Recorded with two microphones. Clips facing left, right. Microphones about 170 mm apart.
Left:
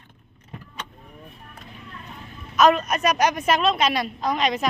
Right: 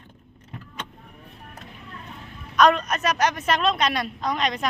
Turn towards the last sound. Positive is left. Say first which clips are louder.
# left 2 dB
turn(degrees=5)  # may be behind; listen again after turning